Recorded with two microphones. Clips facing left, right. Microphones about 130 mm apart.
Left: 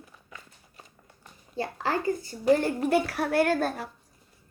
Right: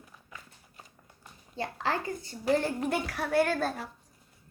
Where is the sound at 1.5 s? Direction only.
5° left (ahead or behind).